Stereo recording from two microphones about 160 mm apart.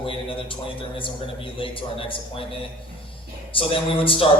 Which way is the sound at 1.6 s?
35° left (ahead or behind).